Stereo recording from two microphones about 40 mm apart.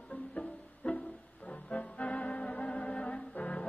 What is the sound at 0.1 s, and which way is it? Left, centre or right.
Music, left.